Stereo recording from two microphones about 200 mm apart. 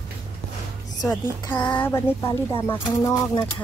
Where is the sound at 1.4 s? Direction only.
10° left (ahead or behind).